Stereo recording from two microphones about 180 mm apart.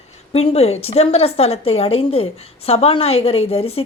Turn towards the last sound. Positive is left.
turn(degrees=35)  # may be behind; listen again after turning